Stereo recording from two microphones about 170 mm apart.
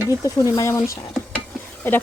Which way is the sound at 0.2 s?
20° left (ahead or behind).